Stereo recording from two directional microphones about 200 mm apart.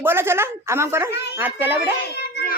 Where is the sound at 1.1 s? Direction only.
60° left (ahead or behind).